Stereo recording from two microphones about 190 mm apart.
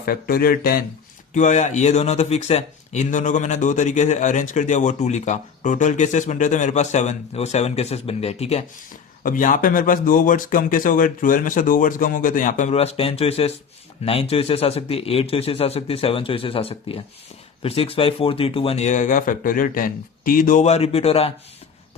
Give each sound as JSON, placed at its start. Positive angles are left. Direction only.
{"t": 0.0, "sound": "speech", "side_deg": 50}
{"t": 1.3, "sound": "speech", "side_deg": 40}
{"t": 9.2, "sound": "speech", "side_deg": 45}